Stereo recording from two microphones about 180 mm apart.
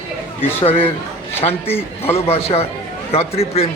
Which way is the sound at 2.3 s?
35° left (ahead or behind).